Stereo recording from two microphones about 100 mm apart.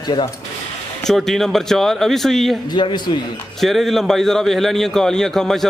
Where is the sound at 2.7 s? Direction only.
50° left (ahead or behind).